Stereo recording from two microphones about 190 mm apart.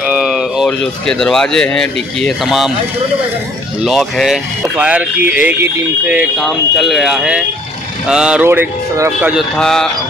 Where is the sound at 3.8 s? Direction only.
Centre (ahead or behind).